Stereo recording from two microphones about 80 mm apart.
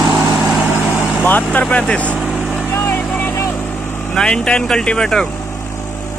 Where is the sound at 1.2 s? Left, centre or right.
Left.